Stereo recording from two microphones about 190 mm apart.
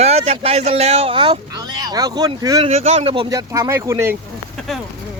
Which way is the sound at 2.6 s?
35° right (ahead or behind).